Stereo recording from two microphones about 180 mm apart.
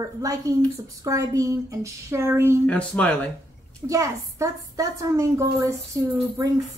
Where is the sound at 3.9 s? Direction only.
15° right (ahead or behind).